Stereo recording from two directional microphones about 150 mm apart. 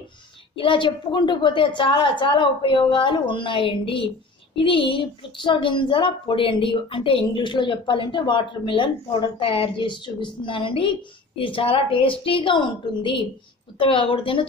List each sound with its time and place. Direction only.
0.6 s a woman's voice: 35° left (ahead or behind)